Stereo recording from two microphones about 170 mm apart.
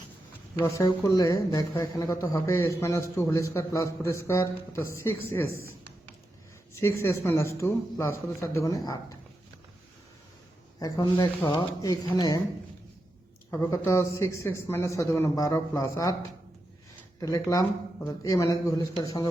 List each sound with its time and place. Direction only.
0.5 s a man's voice: 25° left (ahead or behind)
6.7 s a man's voice: 15° left (ahead or behind)
10.8 s speech: 20° left (ahead or behind)
13.5 s a man's voice: 15° left (ahead or behind)